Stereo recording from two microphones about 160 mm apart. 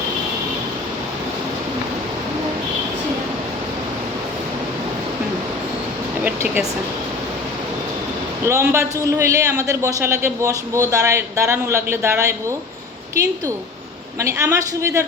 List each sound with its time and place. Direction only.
6.2 s a sound: 10° right (ahead or behind)
8.4 s a man's voice: 15° right (ahead or behind)
14.2 s a man's voice: 20° right (ahead or behind)